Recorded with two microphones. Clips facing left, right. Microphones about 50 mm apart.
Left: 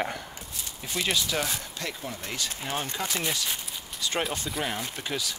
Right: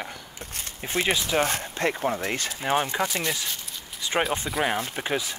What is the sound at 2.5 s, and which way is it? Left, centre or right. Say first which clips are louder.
Speech: right 9 dB; right.